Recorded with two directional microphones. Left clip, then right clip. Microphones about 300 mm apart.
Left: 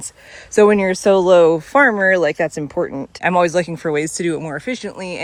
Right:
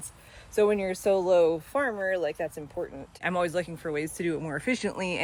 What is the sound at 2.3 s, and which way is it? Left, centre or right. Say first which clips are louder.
Speech: left 13 dB; left.